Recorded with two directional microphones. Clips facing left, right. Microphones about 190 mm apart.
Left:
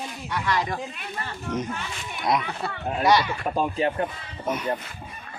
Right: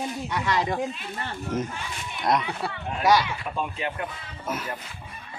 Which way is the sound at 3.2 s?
45° left (ahead or behind).